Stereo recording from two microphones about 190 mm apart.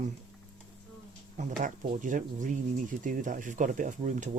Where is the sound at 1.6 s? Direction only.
40° right (ahead or behind).